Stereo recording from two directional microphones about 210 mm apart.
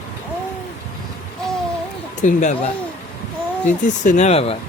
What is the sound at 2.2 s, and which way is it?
Speech, 35° left (ahead or behind).